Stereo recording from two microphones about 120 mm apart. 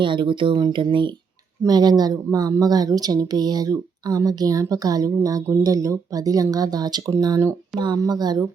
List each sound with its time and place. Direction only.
0.0 s a woman's voice: 45° right (ahead or behind)